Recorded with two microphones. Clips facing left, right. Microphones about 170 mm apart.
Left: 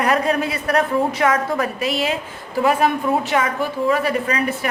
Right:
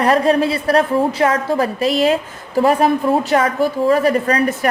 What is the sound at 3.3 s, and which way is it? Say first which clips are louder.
A woman's voice: right 5 dB; 35° right (ahead or behind).